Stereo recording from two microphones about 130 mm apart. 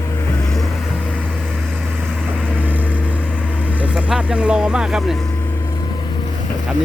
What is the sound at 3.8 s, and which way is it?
Vehicle, 5° right (ahead or behind).